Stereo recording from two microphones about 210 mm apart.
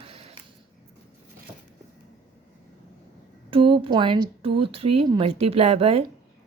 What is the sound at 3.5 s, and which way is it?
A woman's voice, 25° right (ahead or behind).